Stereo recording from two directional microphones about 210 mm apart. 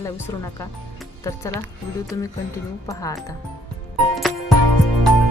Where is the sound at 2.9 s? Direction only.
15° left (ahead or behind).